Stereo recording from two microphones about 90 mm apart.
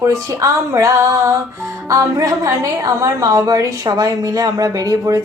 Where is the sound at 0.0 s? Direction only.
35° right (ahead or behind).